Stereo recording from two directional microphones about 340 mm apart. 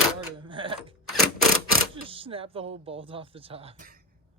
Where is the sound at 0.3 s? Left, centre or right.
Centre.